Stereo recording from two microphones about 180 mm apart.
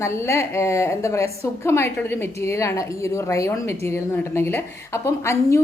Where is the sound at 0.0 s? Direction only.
15° left (ahead or behind).